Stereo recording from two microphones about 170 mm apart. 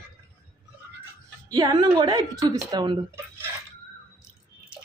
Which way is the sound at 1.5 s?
25° right (ahead or behind).